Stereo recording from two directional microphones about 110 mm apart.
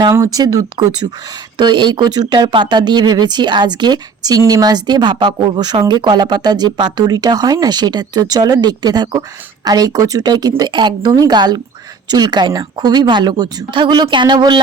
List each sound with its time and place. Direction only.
0.1 s speech: 30° right (ahead or behind)